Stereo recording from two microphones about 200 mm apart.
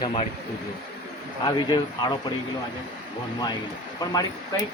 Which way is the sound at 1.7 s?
20° left (ahead or behind).